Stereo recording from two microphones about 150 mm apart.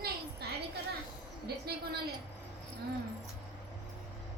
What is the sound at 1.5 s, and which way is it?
Speech, 90° right.